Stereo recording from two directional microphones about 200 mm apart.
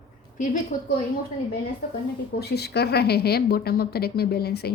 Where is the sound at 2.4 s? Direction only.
55° left (ahead or behind).